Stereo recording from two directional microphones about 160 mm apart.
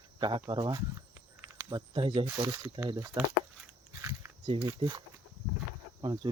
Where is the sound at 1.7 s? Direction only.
30° right (ahead or behind).